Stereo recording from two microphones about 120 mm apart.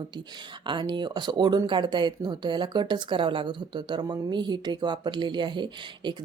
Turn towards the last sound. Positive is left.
turn(degrees=-40)  # may be behind; listen again after turning